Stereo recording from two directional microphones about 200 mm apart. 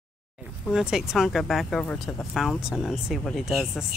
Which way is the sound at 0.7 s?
5° right (ahead or behind).